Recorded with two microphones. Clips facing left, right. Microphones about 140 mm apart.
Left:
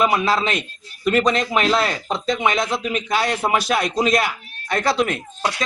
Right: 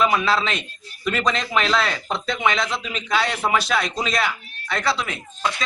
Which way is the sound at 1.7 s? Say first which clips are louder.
Left 2 dB; 10° left (ahead or behind).